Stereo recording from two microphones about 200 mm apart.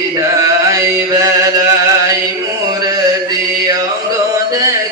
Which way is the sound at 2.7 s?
20° right (ahead or behind).